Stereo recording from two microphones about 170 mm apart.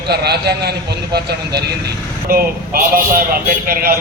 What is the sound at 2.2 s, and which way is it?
Speech, 60° right (ahead or behind).